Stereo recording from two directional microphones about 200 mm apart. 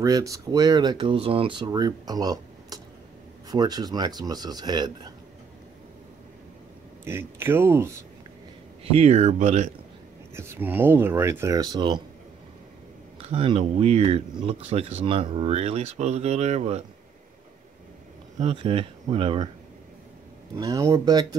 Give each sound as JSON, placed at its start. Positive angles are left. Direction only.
{"t": 0.0, "sound": "speech", "side_deg": -15}
{"t": 7.1, "sound": "speech", "side_deg": -10}
{"t": 8.8, "sound": "speech", "side_deg": -30}
{"t": 10.3, "sound": "speech", "side_deg": -10}
{"t": 13.2, "sound": "speech", "side_deg": -25}
{"t": 18.4, "sound": "speech", "side_deg": -25}
{"t": 20.5, "sound": "speech", "side_deg": -15}